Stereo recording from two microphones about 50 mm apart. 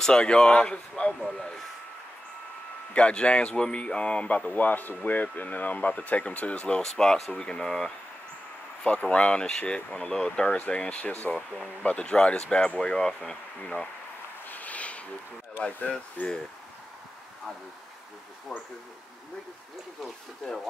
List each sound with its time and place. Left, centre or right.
0.0 s speech: centre
2.9 s speech: left
4.6 s speech: left
6.8 s speech: centre
9.1 s speech: left
11.3 s speech: centre
11.8 s speech: left
14.5 s a sound: left
15.9 s speech: left
20.0 s speech: centre